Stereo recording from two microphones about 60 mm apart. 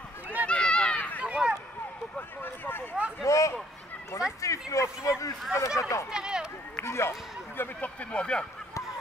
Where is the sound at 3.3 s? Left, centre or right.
Left.